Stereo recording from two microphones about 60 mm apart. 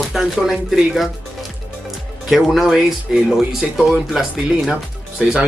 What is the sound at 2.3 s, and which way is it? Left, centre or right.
Speech, centre.